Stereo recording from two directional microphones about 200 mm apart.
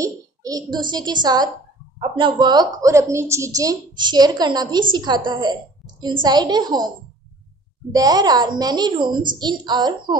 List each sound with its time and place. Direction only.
0.0 s a child's voice: 15° right (ahead or behind)
7.9 s a woman's voice: 20° right (ahead or behind)